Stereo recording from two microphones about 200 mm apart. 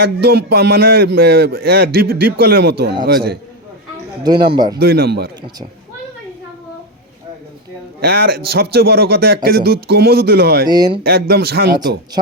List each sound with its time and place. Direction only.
0.0 s a man's voice: 55° right (ahead or behind)
4.2 s speech: 20° right (ahead or behind)
4.8 s a man's voice: 50° right (ahead or behind)
8.0 s a man's voice: 50° right (ahead or behind)
10.7 s speech: 20° right (ahead or behind)
11.0 s a man's voice: 50° right (ahead or behind)